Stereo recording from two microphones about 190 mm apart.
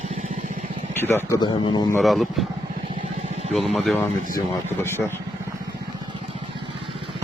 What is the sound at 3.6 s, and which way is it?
Speech, centre (ahead or behind).